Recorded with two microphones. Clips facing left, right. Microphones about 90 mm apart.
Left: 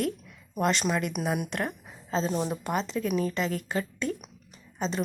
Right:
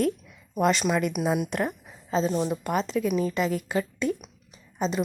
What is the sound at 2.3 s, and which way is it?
Speech, 5° left (ahead or behind).